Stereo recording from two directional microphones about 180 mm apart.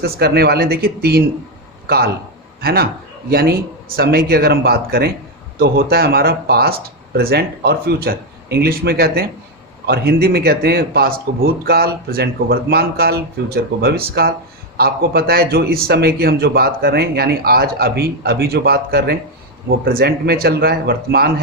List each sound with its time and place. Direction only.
0.0 s a man's voice: 60° right (ahead or behind)
2.6 s a man's voice: 60° right (ahead or behind)